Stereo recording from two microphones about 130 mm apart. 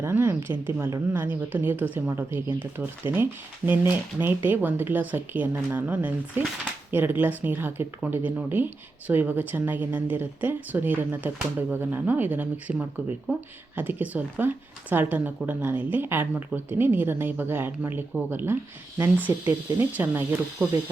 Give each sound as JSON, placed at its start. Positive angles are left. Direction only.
{"t": 0.0, "sound": "speech", "side_deg": -15}